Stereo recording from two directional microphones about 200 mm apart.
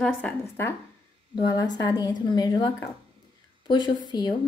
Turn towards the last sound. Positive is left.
turn(degrees=20)  # may be behind; listen again after turning